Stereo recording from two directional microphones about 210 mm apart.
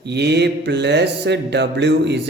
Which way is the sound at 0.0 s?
55° right (ahead or behind).